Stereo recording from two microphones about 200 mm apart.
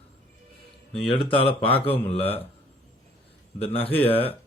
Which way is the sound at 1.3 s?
25° left (ahead or behind).